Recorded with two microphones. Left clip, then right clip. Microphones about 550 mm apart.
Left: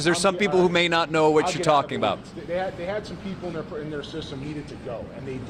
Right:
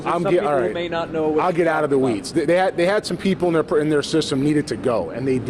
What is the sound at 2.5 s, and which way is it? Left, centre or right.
Speech, right.